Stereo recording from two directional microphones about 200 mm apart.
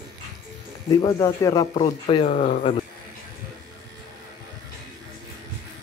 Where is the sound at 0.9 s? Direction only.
20° left (ahead or behind).